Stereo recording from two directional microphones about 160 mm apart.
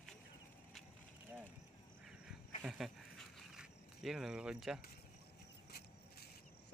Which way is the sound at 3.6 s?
5° right (ahead or behind).